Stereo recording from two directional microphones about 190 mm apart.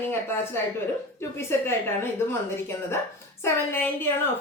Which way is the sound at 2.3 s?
10° left (ahead or behind).